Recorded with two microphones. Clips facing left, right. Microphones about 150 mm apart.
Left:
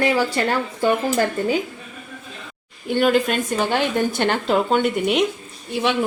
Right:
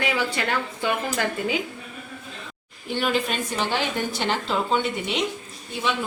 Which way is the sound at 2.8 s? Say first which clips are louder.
Left 7 dB; 45° left (ahead or behind).